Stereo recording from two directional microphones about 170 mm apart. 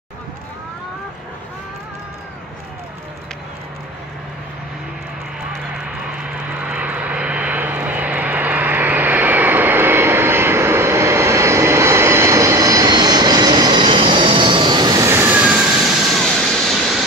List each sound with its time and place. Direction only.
6.5 s vehicle: 10° right (ahead or behind)